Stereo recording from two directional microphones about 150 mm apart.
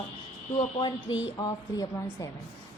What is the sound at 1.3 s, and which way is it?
Speech, 25° left (ahead or behind).